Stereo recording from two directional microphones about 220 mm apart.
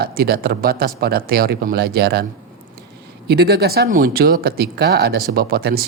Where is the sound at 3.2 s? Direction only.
45° right (ahead or behind).